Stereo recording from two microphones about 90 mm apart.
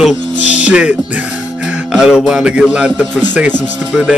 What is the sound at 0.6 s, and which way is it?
Speech, 15° right (ahead or behind).